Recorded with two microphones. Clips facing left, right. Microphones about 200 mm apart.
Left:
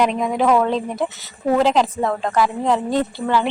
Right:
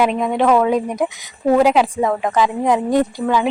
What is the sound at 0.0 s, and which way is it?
Speech, centre (ahead or behind).